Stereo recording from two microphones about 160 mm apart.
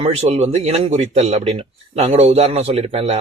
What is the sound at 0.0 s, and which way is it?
A man's voice, 40° right (ahead or behind).